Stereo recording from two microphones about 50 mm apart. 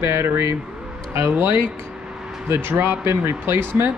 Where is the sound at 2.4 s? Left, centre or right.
Right.